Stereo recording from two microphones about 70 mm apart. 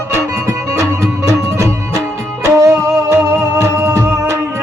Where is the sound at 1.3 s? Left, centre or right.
Right.